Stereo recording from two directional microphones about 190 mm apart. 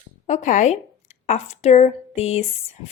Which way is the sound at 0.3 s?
40° left (ahead or behind).